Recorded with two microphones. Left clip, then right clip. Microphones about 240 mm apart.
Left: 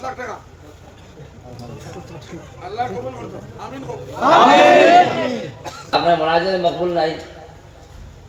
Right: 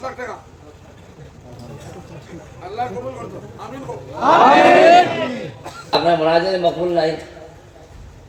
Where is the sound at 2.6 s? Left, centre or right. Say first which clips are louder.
Left 1 dB; centre.